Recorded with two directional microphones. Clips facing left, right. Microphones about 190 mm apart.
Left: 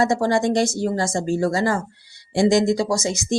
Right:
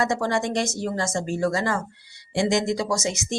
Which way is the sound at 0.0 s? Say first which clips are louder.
Left 5 dB; 35° left (ahead or behind).